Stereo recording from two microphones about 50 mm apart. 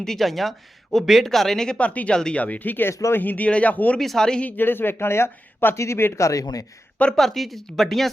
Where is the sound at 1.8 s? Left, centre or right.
Left.